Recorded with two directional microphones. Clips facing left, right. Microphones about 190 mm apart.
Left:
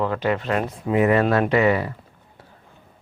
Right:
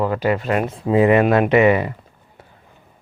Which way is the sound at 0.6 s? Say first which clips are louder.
Right 4 dB; 30° right (ahead or behind).